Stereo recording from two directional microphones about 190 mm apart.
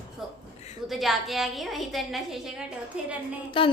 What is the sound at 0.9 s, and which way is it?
A woman's voice, centre (ahead or behind).